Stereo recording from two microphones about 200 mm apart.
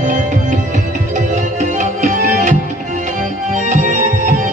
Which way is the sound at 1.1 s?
40° right (ahead or behind).